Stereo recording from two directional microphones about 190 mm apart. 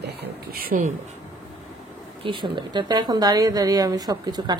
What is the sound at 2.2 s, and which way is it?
Speech, 25° right (ahead or behind).